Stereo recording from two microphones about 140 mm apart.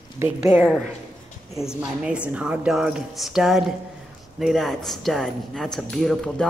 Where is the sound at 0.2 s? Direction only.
20° right (ahead or behind).